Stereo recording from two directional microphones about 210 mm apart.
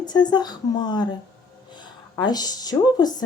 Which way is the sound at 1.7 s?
20° left (ahead or behind).